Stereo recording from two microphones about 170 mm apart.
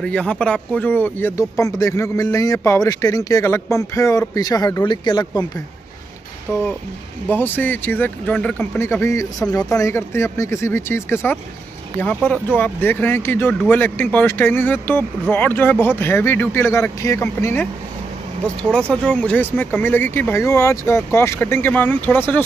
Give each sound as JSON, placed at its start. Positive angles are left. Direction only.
{"t": 0.0, "sound": "speech", "side_deg": 5}
{"t": 7.2, "sound": "speech", "side_deg": 10}